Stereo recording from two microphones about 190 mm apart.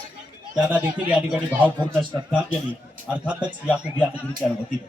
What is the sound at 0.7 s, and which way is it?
A man's voice, 5° right (ahead or behind).